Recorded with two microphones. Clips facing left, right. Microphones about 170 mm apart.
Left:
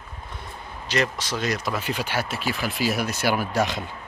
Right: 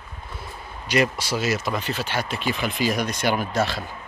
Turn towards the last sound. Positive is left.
turn(degrees=15)  # may be behind; listen again after turning